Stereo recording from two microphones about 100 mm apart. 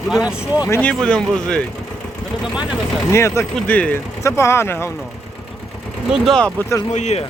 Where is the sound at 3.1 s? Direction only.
30° left (ahead or behind).